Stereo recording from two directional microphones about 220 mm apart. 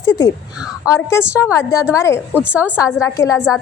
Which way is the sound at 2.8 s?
15° left (ahead or behind).